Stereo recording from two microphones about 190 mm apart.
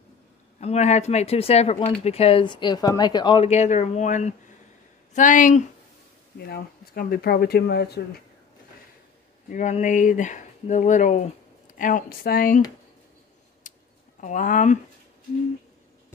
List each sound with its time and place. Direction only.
0.6 s speech: 35° left (ahead or behind)
6.3 s speech: 55° left (ahead or behind)
9.5 s speech: 40° left (ahead or behind)
13.7 s a sound: 40° left (ahead or behind)
14.2 s speech: 45° left (ahead or behind)